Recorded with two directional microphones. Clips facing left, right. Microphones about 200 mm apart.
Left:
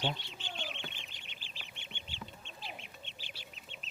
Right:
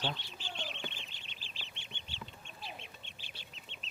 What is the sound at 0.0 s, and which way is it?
Speech, 20° left (ahead or behind).